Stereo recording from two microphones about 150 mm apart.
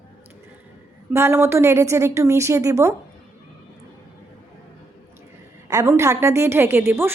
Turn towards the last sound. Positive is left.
turn(degrees=-15)  # may be behind; listen again after turning